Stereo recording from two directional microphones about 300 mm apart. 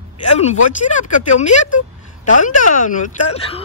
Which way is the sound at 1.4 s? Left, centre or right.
Left.